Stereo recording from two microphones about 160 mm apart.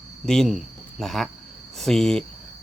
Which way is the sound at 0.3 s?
Centre (ahead or behind).